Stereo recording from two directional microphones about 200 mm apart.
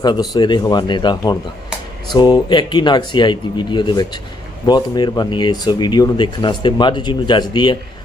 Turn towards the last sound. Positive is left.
turn(degrees=20)  # may be behind; listen again after turning